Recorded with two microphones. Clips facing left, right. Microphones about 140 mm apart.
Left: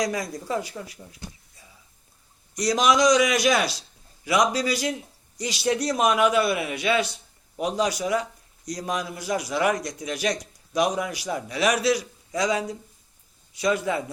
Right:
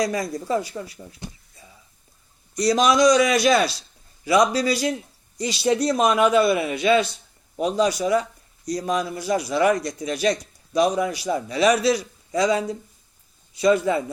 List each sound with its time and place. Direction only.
0.0 s a man's voice: 10° left (ahead or behind)
1.2 s a sound: 20° right (ahead or behind)
2.6 s a man's voice: 15° left (ahead or behind)